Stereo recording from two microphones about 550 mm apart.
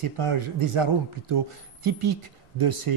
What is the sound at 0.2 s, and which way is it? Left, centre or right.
Speech, right.